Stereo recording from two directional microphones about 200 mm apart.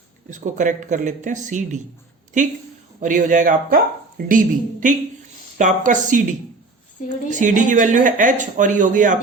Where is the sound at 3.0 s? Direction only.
40° right (ahead or behind).